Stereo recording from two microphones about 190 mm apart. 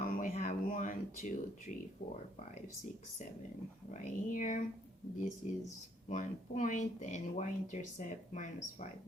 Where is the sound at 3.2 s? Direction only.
40° left (ahead or behind).